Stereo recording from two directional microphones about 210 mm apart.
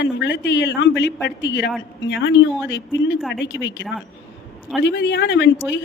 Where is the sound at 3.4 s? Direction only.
60° left (ahead or behind).